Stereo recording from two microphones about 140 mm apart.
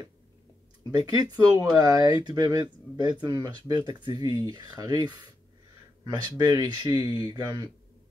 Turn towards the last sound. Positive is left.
turn(degrees=-30)  # may be behind; listen again after turning